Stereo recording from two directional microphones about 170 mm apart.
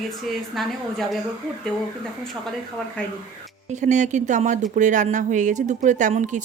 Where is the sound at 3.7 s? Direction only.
45° right (ahead or behind).